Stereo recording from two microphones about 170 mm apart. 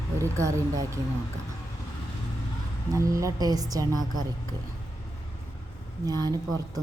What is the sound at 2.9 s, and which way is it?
A woman's voice, 20° right (ahead or behind).